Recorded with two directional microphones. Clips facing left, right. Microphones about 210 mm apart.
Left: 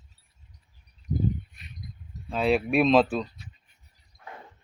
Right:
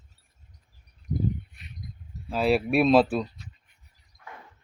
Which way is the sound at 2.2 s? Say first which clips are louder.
Right 1 dB; 5° right (ahead or behind).